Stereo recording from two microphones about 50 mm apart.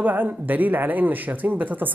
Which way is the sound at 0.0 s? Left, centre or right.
Right.